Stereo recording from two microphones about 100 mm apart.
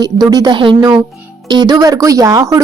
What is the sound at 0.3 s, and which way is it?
A woman's voice, 45° right (ahead or behind).